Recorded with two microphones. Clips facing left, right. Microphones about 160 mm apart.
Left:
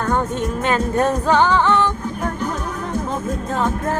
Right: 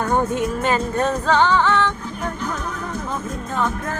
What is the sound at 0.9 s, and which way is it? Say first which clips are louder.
Music: left 3 dB; 15° left (ahead or behind).